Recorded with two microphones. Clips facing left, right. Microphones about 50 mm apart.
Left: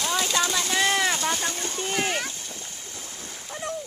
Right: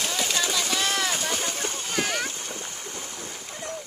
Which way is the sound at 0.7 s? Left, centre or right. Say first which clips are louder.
Left 6 dB; left.